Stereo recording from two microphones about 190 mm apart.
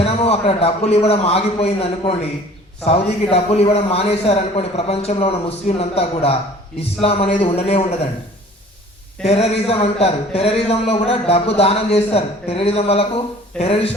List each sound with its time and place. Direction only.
0.0 s a man's voice: 30° left (ahead or behind)
9.2 s a man's voice: 30° left (ahead or behind)